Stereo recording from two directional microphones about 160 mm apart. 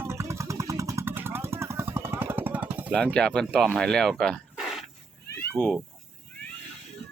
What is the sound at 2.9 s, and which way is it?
Speech, 5° left (ahead or behind).